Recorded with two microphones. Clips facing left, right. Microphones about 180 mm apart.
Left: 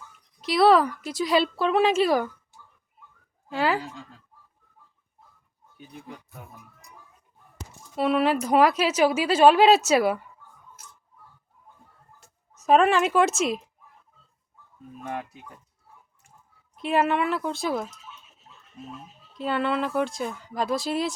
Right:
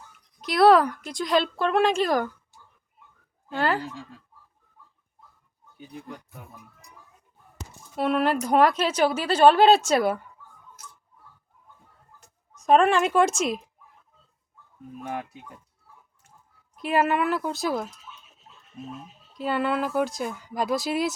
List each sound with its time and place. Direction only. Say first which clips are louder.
0.4 s a woman's voice: right 1 dB; centre (ahead or behind)
3.5 s a woman's voice: left 1 dB; 5° left (ahead or behind)
7.9 s a woman's voice: left 1 dB; centre (ahead or behind)
12.5 s a woman's voice: even; 5° left (ahead or behind)
15.0 s speech: even; 10° right (ahead or behind)
16.7 s a woman's voice: even; centre (ahead or behind)
19.4 s a woman's voice: even; 5° right (ahead or behind)